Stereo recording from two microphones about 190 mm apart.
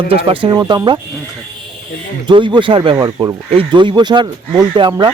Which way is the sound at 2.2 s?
25° right (ahead or behind).